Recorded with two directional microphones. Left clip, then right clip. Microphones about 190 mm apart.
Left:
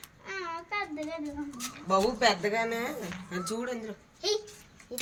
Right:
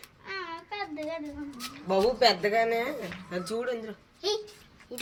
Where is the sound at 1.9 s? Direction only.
30° right (ahead or behind); by 3.8 s 5° right (ahead or behind).